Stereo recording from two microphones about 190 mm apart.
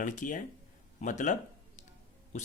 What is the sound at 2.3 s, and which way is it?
Speech, 35° left (ahead or behind).